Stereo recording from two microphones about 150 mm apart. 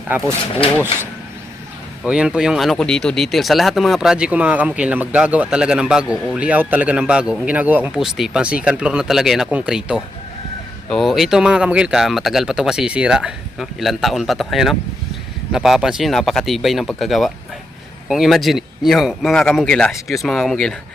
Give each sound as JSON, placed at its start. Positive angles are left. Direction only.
{"t": 0.3, "sound": "speech", "side_deg": 40}
{"t": 2.0, "sound": "speech", "side_deg": -5}